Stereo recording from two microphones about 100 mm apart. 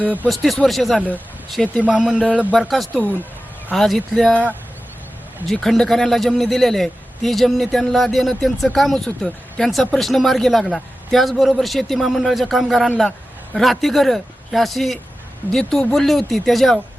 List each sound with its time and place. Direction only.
0.0 s speech: 15° right (ahead or behind)
0.3 s a man's voice: centre (ahead or behind)
1.8 s speech: 10° right (ahead or behind)
2.6 s a man's voice: centre (ahead or behind)
2.9 s speech: 15° left (ahead or behind)
3.7 s a man's voice: 5° left (ahead or behind)
5.5 s a man's voice: 5° left (ahead or behind)